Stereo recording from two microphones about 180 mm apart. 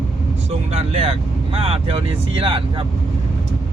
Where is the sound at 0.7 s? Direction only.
30° right (ahead or behind).